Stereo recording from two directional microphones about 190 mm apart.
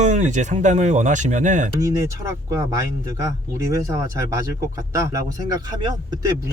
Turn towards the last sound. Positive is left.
turn(degrees=-25)  # may be behind; listen again after turning